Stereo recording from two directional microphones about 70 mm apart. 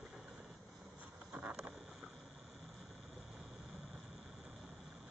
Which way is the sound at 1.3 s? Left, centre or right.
Right.